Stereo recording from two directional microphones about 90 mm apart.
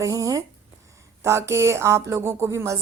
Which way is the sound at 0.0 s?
40° right (ahead or behind).